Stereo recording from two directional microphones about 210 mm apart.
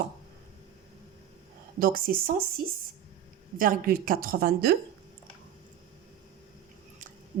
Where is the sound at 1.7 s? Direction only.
45° right (ahead or behind).